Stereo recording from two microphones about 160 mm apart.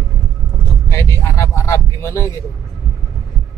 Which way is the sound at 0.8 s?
15° left (ahead or behind).